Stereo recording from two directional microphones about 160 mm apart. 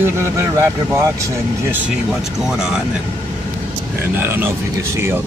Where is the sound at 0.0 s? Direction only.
15° right (ahead or behind).